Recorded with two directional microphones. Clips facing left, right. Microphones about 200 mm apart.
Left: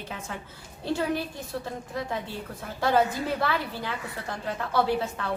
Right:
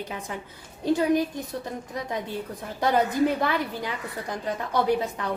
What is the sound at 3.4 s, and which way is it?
A woman's voice, 15° right (ahead or behind).